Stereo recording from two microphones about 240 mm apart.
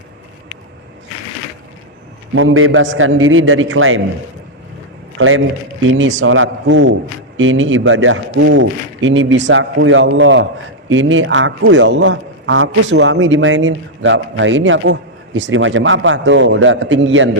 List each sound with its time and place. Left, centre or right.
2.3 s a man's voice: right
5.1 s a man's voice: right